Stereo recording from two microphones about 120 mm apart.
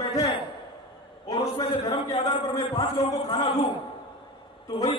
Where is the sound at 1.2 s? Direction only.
35° left (ahead or behind).